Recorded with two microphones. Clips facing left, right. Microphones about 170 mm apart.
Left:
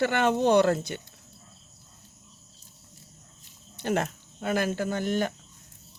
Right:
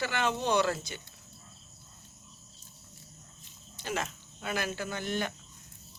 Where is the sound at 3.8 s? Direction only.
55° left (ahead or behind).